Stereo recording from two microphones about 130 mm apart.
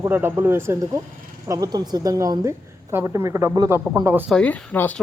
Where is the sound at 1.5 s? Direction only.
30° right (ahead or behind).